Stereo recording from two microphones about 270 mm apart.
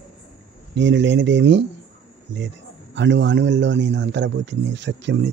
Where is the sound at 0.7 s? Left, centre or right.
Right.